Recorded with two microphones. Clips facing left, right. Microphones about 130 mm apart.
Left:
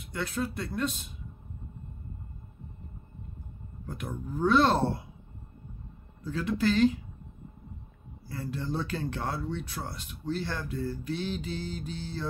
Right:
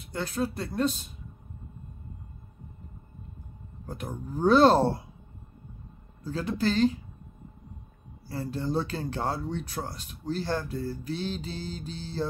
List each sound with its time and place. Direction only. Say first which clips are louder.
0.0 s mantra: right 2 dB; 35° right (ahead or behind)
3.8 s mantra: right 1 dB; 35° right (ahead or behind)
6.2 s mantra: even; 35° right (ahead or behind)
8.3 s mantra: right 3 dB; 30° right (ahead or behind)